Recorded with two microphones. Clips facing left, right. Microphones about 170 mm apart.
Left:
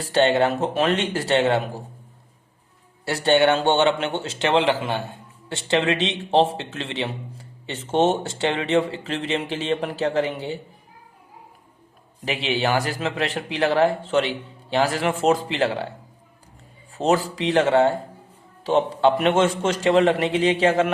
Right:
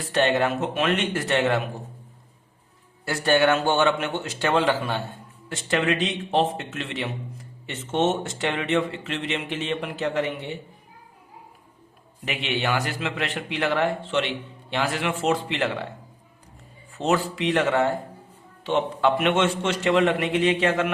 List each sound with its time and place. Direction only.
0.0 s a man's voice: 30° left (ahead or behind)
3.1 s a man's voice: 25° left (ahead or behind)
12.2 s a man's voice: 30° left (ahead or behind)
16.9 s a man's voice: 35° left (ahead or behind)